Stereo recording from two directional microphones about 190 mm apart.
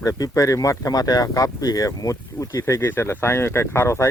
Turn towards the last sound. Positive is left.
turn(degrees=15)  # may be behind; listen again after turning